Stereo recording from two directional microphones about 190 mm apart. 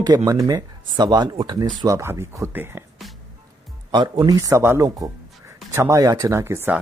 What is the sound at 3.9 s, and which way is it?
Speech, 25° right (ahead or behind).